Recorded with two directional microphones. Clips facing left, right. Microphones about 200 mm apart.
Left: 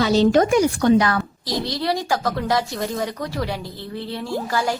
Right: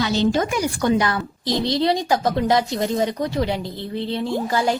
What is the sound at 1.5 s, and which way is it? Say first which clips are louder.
A woman's voice: right 5 dB; 25° right (ahead or behind).